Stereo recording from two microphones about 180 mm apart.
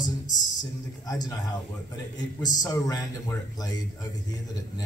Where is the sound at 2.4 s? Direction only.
20° left (ahead or behind).